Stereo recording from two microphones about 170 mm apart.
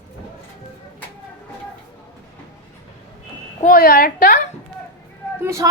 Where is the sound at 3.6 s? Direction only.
55° left (ahead or behind).